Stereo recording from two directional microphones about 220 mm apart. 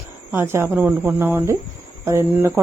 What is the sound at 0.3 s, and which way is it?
Speech, 10° right (ahead or behind).